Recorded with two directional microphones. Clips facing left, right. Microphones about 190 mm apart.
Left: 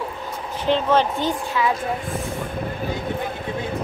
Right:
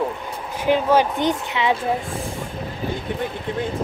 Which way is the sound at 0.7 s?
10° right (ahead or behind).